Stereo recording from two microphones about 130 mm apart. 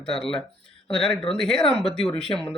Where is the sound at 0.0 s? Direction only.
5° left (ahead or behind).